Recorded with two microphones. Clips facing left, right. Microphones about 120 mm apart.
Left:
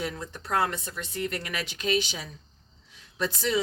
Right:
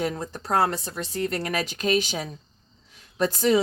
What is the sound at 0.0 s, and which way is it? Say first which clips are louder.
Speech: right 6 dB; 40° right (ahead or behind).